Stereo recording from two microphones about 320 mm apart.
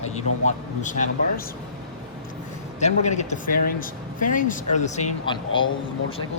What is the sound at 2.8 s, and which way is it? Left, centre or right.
Speech, left.